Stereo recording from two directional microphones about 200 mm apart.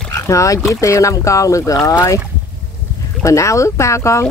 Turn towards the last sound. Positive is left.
turn(degrees=15)  # may be behind; listen again after turning